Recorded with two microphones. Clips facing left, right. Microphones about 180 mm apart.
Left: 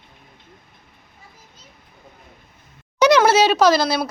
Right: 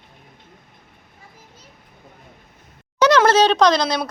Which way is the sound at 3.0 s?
10° left (ahead or behind).